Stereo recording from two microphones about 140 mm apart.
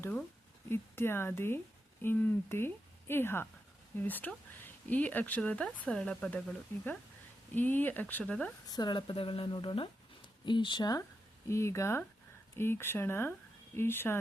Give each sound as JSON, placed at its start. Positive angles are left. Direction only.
{"t": 0.0, "sound": "speech", "side_deg": 10}
{"t": 8.6, "sound": "speech", "side_deg": 30}